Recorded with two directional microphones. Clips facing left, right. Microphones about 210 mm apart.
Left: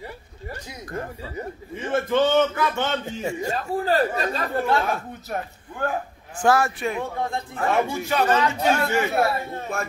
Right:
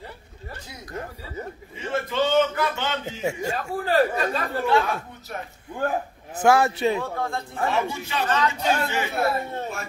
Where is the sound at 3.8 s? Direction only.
35° left (ahead or behind).